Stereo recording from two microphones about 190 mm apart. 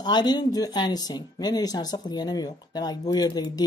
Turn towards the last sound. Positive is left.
turn(degrees=20)  # may be behind; listen again after turning